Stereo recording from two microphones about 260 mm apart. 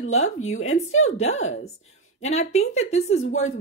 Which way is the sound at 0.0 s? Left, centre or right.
Left.